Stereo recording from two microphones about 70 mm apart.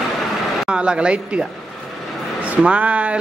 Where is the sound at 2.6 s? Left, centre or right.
Centre.